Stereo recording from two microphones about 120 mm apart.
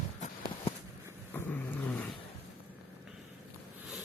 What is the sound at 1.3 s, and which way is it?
Dog, 15° left (ahead or behind).